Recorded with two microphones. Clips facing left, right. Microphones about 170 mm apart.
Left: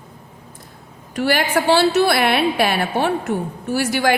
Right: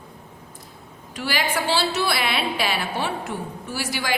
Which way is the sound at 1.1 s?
55° left (ahead or behind).